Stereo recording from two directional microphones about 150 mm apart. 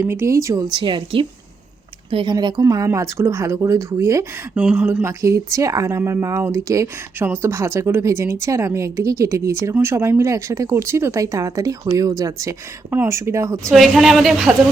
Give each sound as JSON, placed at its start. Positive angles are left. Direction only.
{"t": 0.0, "sound": "speech", "side_deg": -15}
{"t": 4.5, "sound": "speech", "side_deg": -10}
{"t": 13.7, "sound": "a woman's voice", "side_deg": 0}